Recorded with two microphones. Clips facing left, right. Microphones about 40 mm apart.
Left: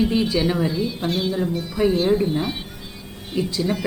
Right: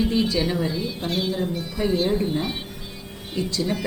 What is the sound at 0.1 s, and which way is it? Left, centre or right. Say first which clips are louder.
Speech: left 2 dB; centre.